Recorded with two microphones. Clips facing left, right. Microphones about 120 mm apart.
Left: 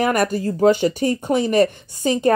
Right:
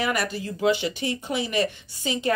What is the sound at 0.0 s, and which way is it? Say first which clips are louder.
Speech: left 8 dB; 50° left (ahead or behind).